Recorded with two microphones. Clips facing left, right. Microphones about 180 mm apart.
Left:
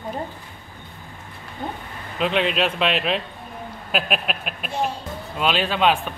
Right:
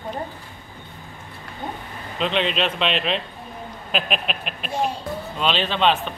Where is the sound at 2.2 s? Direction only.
5° left (ahead or behind).